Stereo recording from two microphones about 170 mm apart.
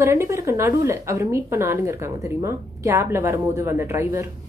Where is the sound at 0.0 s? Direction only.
15° right (ahead or behind).